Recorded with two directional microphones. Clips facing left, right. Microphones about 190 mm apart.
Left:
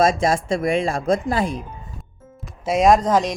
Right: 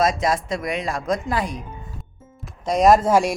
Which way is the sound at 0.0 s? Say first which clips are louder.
Left 3 dB; 30° left (ahead or behind).